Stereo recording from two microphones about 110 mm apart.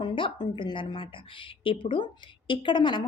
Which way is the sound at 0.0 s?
50° left (ahead or behind).